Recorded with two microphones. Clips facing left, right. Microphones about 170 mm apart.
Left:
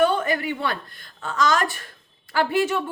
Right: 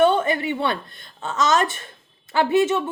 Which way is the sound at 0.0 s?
25° right (ahead or behind).